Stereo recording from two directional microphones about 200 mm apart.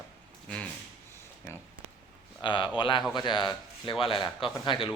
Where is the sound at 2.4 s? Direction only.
25° left (ahead or behind).